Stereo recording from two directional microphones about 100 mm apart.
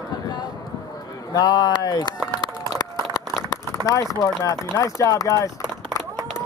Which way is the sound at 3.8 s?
30° left (ahead or behind).